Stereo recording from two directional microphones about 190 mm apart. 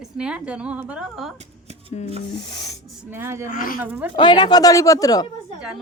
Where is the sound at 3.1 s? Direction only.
15° right (ahead or behind).